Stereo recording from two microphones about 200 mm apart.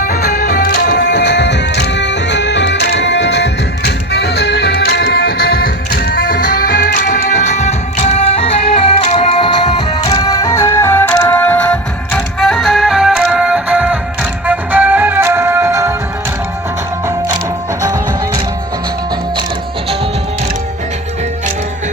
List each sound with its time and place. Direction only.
0.0 s music: 45° left (ahead or behind); by 16.0 s 15° right (ahead or behind)